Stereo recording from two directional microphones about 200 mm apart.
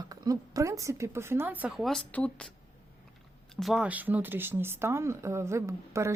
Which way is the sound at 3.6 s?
Centre (ahead or behind).